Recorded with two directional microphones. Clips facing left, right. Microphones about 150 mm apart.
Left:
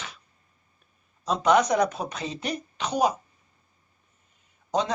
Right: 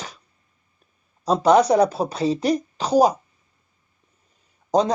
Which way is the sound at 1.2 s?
35° right (ahead or behind).